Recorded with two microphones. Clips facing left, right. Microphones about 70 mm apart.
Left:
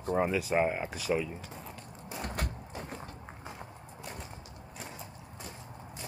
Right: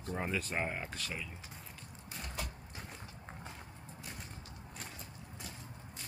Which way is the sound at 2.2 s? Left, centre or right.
Left.